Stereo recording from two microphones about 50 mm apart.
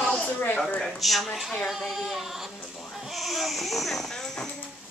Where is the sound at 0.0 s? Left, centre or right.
Centre.